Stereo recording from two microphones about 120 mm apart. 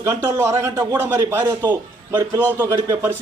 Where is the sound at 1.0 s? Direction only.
20° right (ahead or behind).